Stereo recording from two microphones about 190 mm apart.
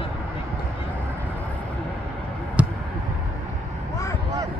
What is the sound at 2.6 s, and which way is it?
Basketball bounce, 5° right (ahead or behind).